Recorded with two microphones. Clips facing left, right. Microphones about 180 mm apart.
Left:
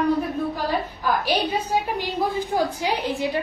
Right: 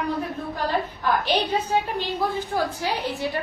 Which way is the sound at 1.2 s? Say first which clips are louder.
Even; 10° left (ahead or behind).